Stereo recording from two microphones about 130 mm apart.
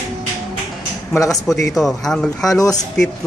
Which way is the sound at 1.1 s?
25° left (ahead or behind).